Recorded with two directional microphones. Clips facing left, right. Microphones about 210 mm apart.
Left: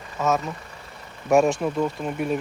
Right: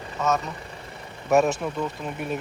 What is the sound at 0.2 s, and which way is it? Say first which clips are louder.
Speech: left 2 dB; centre (ahead or behind).